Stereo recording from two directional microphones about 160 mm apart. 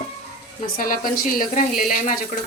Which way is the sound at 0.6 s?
65° left (ahead or behind).